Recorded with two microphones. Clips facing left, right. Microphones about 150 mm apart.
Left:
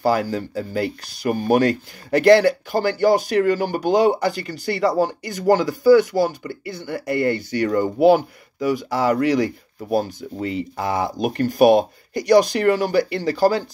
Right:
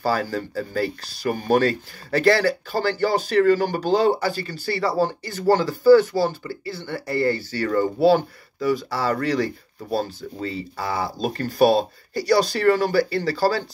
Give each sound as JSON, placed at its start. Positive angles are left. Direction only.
{"t": 0.0, "sound": "speech", "side_deg": 15}